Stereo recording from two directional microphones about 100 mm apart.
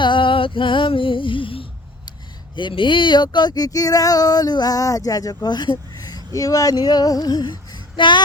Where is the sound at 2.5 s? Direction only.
55° left (ahead or behind).